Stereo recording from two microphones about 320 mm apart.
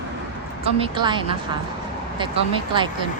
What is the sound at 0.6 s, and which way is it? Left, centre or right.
A woman's voice, centre.